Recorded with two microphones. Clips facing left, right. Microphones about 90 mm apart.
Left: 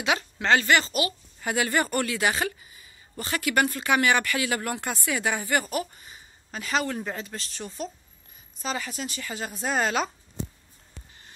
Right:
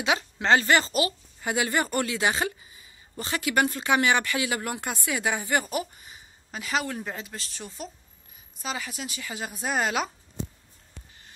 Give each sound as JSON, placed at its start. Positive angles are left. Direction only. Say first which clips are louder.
{"t": 0.0, "sound": "speech", "louder": "even", "side_deg": -25}
{"t": 1.4, "sound": "speech", "louder": "left 1 dB", "side_deg": -20}